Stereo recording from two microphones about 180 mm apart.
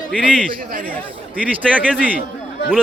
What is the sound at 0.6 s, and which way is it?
Speech, 55° right (ahead or behind).